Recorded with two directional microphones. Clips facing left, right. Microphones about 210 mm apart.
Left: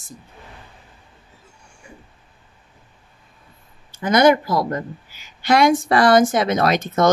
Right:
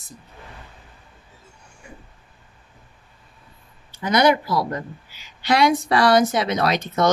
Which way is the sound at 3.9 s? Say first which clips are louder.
Left 3 dB; 50° left (ahead or behind).